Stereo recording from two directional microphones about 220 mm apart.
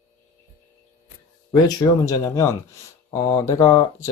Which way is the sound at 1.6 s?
15° left (ahead or behind).